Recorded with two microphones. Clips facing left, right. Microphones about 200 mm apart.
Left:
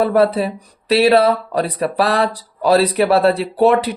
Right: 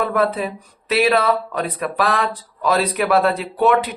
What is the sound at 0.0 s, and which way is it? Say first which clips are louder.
Speech: left 5 dB; 35° left (ahead or behind).